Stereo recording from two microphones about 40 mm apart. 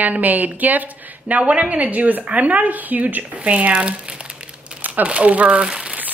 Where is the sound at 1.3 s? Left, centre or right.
Right.